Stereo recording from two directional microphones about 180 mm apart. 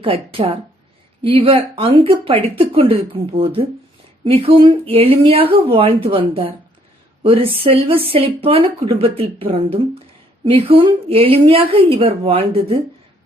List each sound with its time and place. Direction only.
0.0 s speech: 30° right (ahead or behind)